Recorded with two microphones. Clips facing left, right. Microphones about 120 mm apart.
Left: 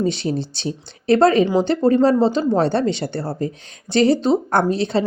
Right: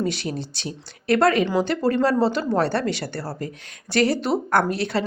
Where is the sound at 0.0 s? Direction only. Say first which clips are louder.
Left 5 dB; 25° left (ahead or behind).